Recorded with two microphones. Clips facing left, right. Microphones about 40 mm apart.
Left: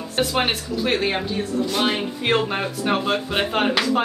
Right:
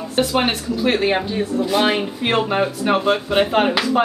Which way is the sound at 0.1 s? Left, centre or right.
Centre.